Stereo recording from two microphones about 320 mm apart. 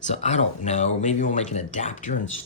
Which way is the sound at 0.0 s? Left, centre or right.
Left.